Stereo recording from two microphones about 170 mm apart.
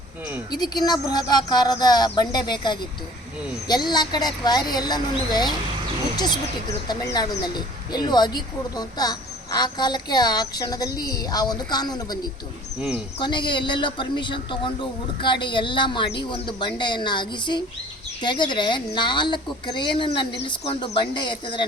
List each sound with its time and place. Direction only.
0.5 s a man's voice: 25° left (ahead or behind)
13.1 s a man's voice: 25° left (ahead or behind)